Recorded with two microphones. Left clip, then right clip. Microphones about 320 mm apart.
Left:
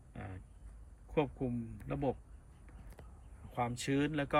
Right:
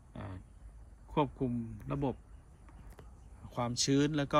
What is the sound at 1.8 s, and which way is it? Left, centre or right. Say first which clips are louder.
Speech: even; centre.